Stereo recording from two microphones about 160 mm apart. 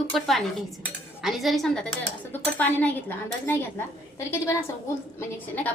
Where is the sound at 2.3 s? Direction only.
10° left (ahead or behind).